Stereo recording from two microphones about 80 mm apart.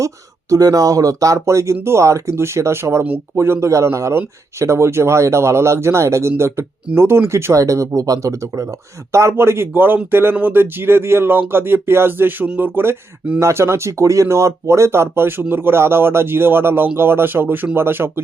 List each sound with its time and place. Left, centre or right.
0.5 s speech: right